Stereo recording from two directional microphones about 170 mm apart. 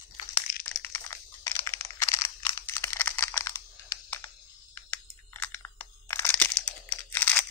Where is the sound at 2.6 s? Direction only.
15° left (ahead or behind).